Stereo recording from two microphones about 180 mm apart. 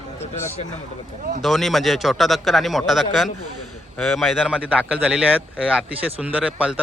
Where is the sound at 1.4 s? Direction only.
Centre (ahead or behind).